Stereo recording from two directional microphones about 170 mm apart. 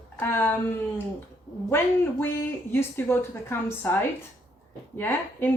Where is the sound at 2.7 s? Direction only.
15° left (ahead or behind).